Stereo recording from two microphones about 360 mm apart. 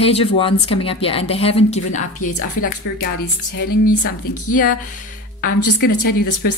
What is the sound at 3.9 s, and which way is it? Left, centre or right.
Speech, left.